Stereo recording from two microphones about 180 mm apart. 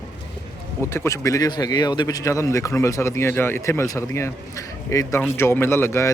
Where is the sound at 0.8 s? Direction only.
15° left (ahead or behind).